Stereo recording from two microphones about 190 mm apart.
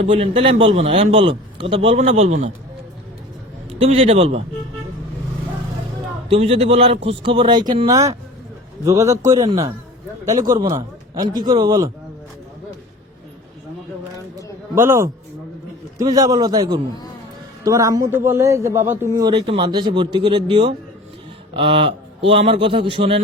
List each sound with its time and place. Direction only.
0.0 s a man's voice: 30° right (ahead or behind)
3.7 s a man's voice: 30° right (ahead or behind)
6.2 s a man's voice: 30° right (ahead or behind)
14.8 s a man's voice: 15° right (ahead or behind); by 23.2 s 30° right (ahead or behind)